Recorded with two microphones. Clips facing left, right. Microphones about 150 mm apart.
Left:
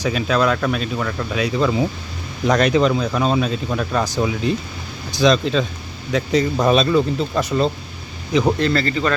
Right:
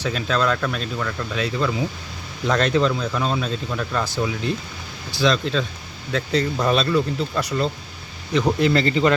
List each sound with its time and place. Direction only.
0.0 s speech: 10° left (ahead or behind)
2.5 s speech: 15° left (ahead or behind)
8.3 s speech: 10° left (ahead or behind)
8.5 s speech: 15° right (ahead or behind)